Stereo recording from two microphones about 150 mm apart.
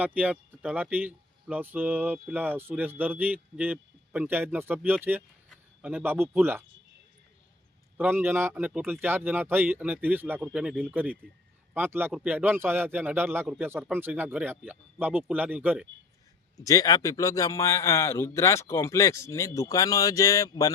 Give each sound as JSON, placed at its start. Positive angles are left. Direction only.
{"t": 0.0, "sound": "speech", "side_deg": -10}
{"t": 7.9, "sound": "speech", "side_deg": -15}
{"t": 16.6, "sound": "a man's voice", "side_deg": 25}